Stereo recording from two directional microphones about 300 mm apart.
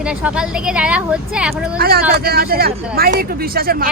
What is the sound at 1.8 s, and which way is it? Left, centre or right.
Speech, right.